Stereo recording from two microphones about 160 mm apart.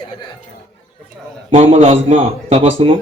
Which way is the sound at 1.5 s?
35° right (ahead or behind).